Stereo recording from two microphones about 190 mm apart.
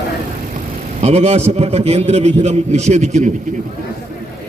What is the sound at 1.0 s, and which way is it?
A man's voice, 35° right (ahead or behind).